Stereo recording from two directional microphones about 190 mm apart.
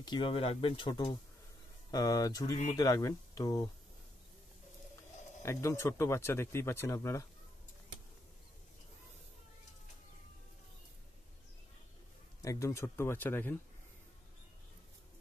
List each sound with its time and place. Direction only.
0.0 s speech: 25° left (ahead or behind)
5.4 s speech: 15° left (ahead or behind)
12.4 s speech: 15° left (ahead or behind)